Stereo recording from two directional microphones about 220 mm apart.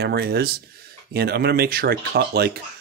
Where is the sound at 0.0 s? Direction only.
45° right (ahead or behind).